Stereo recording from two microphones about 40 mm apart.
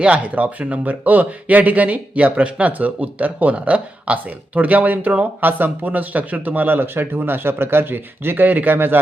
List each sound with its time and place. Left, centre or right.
0.0 s a man's voice: right